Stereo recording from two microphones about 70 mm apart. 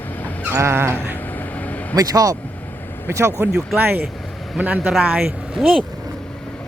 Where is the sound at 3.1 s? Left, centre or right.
Right.